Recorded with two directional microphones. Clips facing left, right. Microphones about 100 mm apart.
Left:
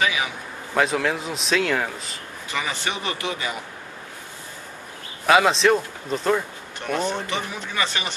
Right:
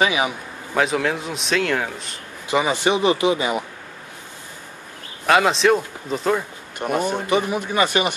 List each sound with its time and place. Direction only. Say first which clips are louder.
0.0 s a man's voice: right 4 dB; 25° right (ahead or behind)
0.7 s a man's voice: right 1 dB; centre (ahead or behind)
2.4 s a man's voice: right 9 dB; 20° right (ahead or behind)
5.2 s a man's voice: right 1 dB; centre (ahead or behind)